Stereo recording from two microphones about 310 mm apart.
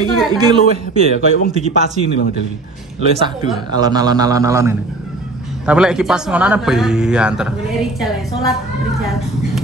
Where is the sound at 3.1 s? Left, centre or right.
Centre.